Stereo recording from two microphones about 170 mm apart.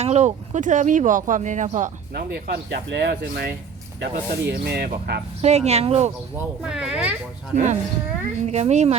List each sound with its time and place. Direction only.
0.0 s speech: 40° right (ahead or behind)
2.1 s speech: 70° right (ahead or behind)
5.4 s speech: 40° right (ahead or behind)
6.3 s speech: 5° right (ahead or behind)
7.5 s speech: 45° right (ahead or behind)